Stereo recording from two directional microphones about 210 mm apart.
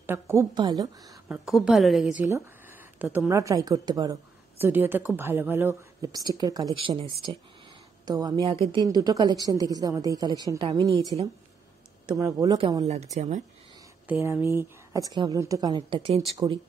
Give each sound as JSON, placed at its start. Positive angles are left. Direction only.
{"t": 0.0, "sound": "a woman's voice", "side_deg": -10}
{"t": 1.3, "sound": "a woman's voice", "side_deg": -5}
{"t": 2.1, "sound": "a woman's voice", "side_deg": -15}
{"t": 12.1, "sound": "a woman's voice", "side_deg": -15}
{"t": 14.0, "sound": "a woman's voice", "side_deg": -10}